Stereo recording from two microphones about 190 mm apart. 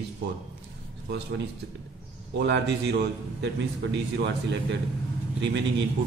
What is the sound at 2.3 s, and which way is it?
A man's voice, 65° right (ahead or behind).